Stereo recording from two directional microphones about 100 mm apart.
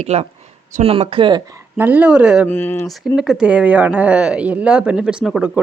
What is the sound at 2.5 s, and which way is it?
Speech, 20° left (ahead or behind).